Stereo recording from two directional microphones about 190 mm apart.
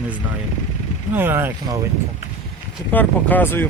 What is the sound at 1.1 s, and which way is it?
Speech, 10° right (ahead or behind).